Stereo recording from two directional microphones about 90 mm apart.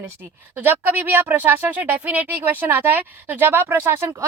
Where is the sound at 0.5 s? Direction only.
20° right (ahead or behind).